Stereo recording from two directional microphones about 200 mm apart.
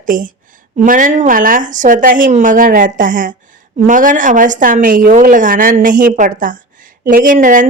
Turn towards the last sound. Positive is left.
turn(degrees=-40)  # may be behind; listen again after turning